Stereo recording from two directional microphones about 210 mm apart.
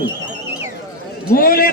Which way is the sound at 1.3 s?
45° left (ahead or behind).